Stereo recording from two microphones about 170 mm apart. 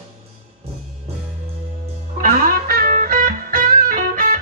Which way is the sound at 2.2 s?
60° right (ahead or behind).